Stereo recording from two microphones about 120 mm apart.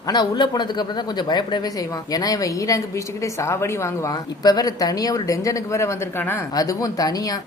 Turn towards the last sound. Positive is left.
turn(degrees=30)  # may be behind; listen again after turning